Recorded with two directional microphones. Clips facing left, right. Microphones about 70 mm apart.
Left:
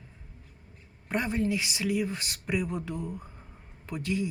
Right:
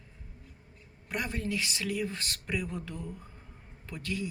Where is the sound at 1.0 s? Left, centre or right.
Left.